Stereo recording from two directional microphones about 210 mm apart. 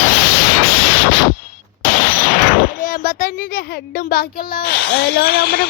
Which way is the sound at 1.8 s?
40° left (ahead or behind).